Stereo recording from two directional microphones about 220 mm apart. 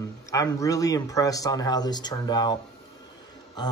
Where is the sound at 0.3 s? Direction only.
15° left (ahead or behind).